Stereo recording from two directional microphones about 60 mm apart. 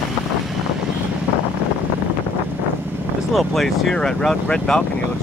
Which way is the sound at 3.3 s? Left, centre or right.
Centre.